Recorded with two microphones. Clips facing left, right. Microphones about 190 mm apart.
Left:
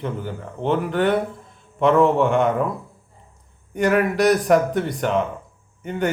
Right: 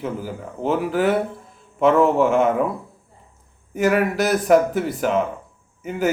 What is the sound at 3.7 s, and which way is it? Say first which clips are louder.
Speech: even; 5° right (ahead or behind).